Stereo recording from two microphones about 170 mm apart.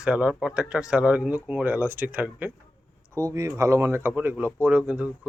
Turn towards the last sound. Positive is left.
turn(degrees=-10)  # may be behind; listen again after turning